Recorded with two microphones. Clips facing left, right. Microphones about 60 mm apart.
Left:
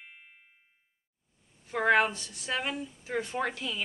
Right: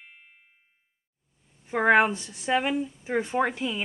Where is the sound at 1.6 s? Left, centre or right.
Right.